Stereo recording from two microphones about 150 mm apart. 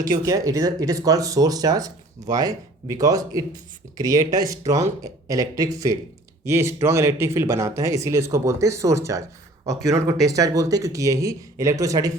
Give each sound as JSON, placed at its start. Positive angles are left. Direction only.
{"t": 0.2, "sound": "speech", "side_deg": -20}